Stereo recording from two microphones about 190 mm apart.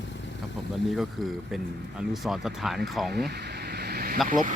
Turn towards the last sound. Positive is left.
turn(degrees=-45)  # may be behind; listen again after turning